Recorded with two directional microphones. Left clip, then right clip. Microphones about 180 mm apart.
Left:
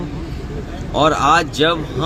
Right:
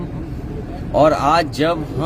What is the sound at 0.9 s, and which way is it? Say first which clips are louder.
Speech: even; 25° right (ahead or behind).